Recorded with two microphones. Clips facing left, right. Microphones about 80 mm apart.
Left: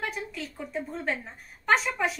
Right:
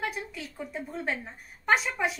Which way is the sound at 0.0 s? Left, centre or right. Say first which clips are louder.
Even; centre.